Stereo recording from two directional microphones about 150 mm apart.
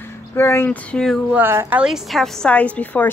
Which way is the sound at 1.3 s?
15° right (ahead or behind).